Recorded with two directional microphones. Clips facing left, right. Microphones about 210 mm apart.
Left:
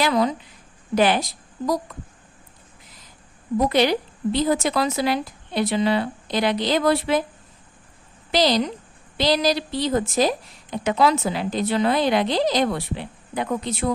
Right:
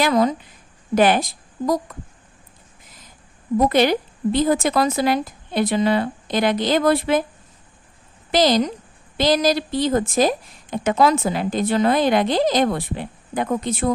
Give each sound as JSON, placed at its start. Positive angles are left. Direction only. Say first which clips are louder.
{"t": 0.0, "sound": "a woman's voice", "louder": "right 3 dB", "side_deg": -45}
{"t": 3.6, "sound": "a woman's voice", "louder": "right 2 dB", "side_deg": -50}
{"t": 8.3, "sound": "a woman's voice", "louder": "right 3 dB", "side_deg": -50}